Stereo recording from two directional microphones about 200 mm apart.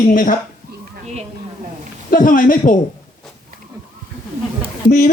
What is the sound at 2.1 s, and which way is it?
Speech, 45° left (ahead or behind).